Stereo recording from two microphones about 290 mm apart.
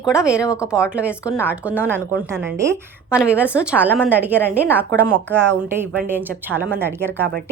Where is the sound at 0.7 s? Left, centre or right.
Centre.